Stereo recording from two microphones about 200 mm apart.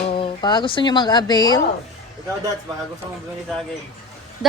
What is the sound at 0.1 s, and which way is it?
Speech, 25° left (ahead or behind).